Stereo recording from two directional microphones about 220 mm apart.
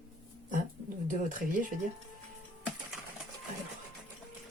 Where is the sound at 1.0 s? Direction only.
35° right (ahead or behind).